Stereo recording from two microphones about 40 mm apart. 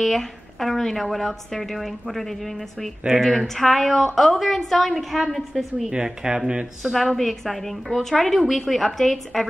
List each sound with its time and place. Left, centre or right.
0.0 s a woman's voice: centre
5.9 s speech: centre
7.0 s a woman's voice: centre